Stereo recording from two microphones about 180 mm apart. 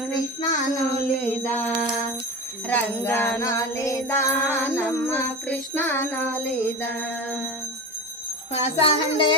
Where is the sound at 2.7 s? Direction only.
10° left (ahead or behind).